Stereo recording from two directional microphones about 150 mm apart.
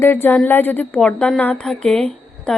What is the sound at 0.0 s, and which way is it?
A woman's voice, 15° left (ahead or behind).